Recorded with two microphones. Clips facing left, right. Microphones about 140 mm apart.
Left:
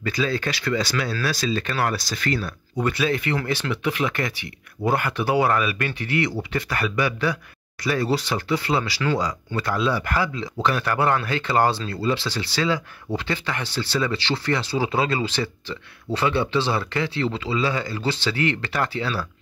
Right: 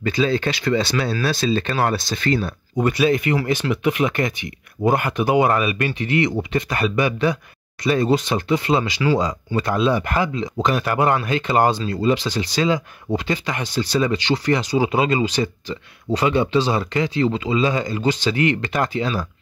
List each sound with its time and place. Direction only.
0.0 s speech: 25° right (ahead or behind)